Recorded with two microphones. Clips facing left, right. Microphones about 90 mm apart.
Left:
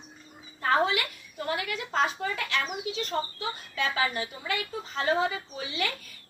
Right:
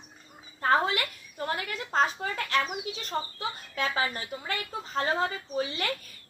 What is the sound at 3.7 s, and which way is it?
Speech, 35° right (ahead or behind).